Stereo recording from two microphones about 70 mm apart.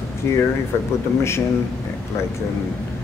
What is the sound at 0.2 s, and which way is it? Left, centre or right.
Speech, left.